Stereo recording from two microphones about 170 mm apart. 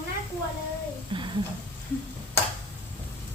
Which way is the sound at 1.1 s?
25° right (ahead or behind).